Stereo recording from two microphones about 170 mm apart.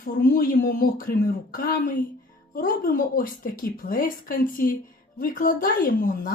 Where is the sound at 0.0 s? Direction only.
55° left (ahead or behind).